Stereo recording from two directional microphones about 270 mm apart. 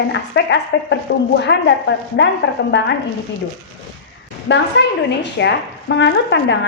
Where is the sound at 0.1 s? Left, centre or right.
Left.